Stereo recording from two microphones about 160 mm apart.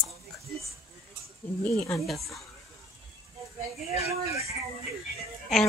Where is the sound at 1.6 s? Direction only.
15° left (ahead or behind).